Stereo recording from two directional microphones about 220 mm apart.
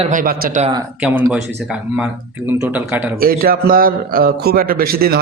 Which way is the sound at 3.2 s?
40° right (ahead or behind).